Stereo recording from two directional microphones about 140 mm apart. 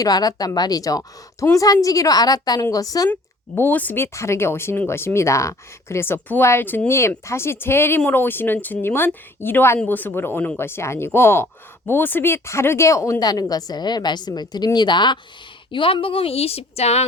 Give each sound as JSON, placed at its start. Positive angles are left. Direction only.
{"t": 0.0, "sound": "speech", "side_deg": 25}
{"t": 3.1, "sound": "a woman's voice", "side_deg": 15}